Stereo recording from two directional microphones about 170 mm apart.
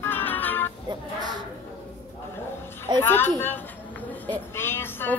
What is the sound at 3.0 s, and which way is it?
Speech, 10° left (ahead or behind).